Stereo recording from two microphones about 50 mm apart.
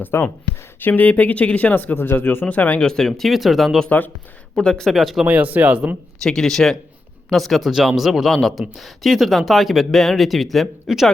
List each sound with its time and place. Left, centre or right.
0.1 s speech: left
0.8 s speech: left
2.8 s speech: centre
3.1 s speech: centre
3.8 s speech: left
4.6 s speech: centre
4.9 s speech: centre
5.2 s speech: right
6.2 s speech: centre